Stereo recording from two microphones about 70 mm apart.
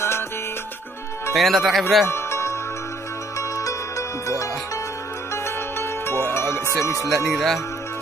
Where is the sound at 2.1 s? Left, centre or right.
Left.